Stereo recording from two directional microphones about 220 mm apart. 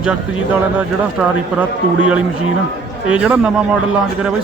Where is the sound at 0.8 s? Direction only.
5° right (ahead or behind).